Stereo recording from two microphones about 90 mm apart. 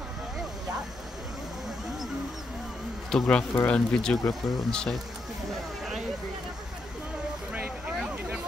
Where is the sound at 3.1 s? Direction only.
10° left (ahead or behind).